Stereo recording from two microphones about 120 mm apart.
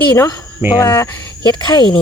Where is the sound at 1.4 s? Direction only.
35° left (ahead or behind).